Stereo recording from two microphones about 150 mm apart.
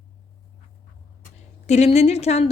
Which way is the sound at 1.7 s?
45° left (ahead or behind).